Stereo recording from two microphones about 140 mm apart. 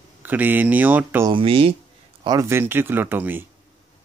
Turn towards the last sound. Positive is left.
turn(degrees=-15)  # may be behind; listen again after turning